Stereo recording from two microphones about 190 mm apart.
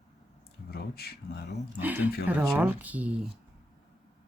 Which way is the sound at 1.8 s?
10° right (ahead or behind).